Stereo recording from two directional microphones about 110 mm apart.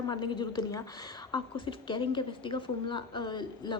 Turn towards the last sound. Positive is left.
turn(degrees=45)  # may be behind; listen again after turning